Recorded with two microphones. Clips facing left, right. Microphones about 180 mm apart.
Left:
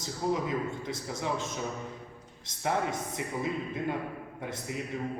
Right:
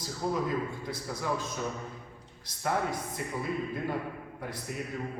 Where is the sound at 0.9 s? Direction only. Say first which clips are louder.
Even; 25° left (ahead or behind).